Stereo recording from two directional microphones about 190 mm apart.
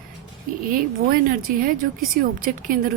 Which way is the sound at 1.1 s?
45° right (ahead or behind).